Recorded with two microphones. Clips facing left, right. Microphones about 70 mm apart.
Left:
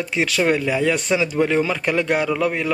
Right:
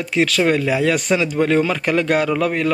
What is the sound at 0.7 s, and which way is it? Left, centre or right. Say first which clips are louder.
A man's voice: right 2 dB; centre.